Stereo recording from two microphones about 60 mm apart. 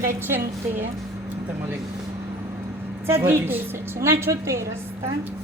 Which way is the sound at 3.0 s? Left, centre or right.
Right.